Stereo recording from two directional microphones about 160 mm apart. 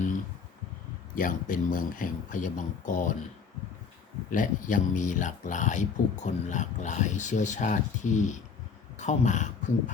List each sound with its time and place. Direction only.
1.1 s speech: 60° left (ahead or behind)
4.3 s speech: 55° left (ahead or behind)